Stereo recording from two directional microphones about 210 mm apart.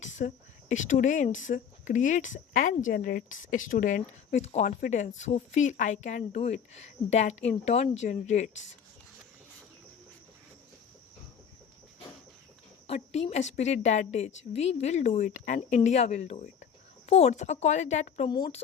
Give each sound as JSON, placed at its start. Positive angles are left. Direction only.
{"t": 0.0, "sound": "speech", "side_deg": 35}
{"t": 12.9, "sound": "speech", "side_deg": 30}
{"t": 18.3, "sound": "speech", "side_deg": 20}